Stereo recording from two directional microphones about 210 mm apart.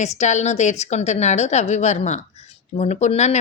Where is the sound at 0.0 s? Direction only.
35° left (ahead or behind).